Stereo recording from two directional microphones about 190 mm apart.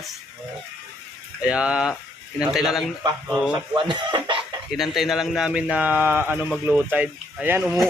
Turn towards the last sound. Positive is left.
turn(degrees=-10)  # may be behind; listen again after turning